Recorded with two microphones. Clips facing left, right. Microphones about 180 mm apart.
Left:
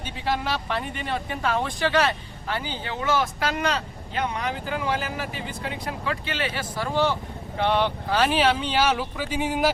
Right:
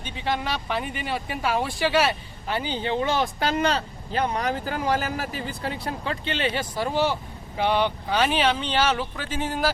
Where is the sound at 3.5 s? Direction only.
35° right (ahead or behind).